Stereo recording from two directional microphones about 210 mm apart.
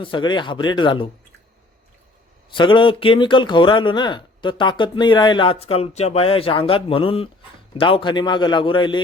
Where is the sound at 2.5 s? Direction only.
25° left (ahead or behind).